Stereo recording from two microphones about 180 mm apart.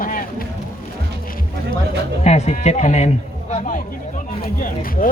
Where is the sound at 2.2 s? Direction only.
40° left (ahead or behind).